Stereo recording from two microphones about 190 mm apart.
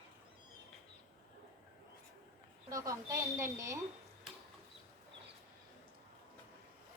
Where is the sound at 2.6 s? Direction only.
15° right (ahead or behind).